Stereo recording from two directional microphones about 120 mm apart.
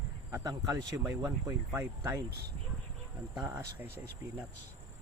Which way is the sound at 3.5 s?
25° right (ahead or behind).